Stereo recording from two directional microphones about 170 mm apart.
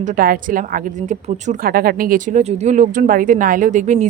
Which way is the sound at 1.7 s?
60° right (ahead or behind).